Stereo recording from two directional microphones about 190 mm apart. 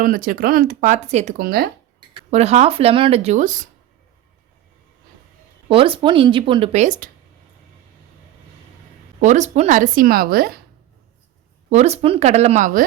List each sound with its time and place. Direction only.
0.0 s speech: 50° right (ahead or behind)
2.0 s speech: 30° right (ahead or behind)
5.6 s speech: 30° right (ahead or behind)
6.8 s speech: 45° right (ahead or behind)
9.2 s speech: 40° right (ahead or behind)
11.7 s speech: 35° right (ahead or behind)